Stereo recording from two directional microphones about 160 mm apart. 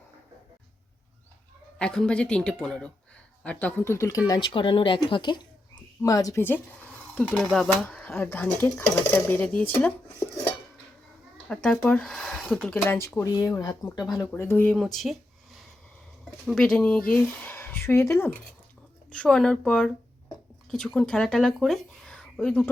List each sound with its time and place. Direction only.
1.8 s speech: 5° left (ahead or behind)
4.3 s speech: 30° left (ahead or behind); by 6.6 s 15° left (ahead or behind)
7.3 s speech: centre (ahead or behind)
11.4 s speech: 5° left (ahead or behind)
12.7 s speech: 15° left (ahead or behind)
14.8 s speech: centre (ahead or behind)
16.5 s speech: 5° left (ahead or behind)